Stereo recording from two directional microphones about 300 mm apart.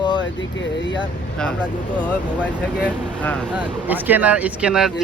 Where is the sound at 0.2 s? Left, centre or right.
Left.